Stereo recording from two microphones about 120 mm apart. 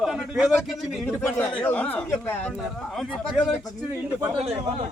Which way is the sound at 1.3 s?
15° left (ahead or behind).